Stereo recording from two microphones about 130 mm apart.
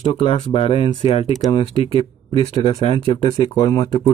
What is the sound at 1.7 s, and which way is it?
Speech, 50° left (ahead or behind).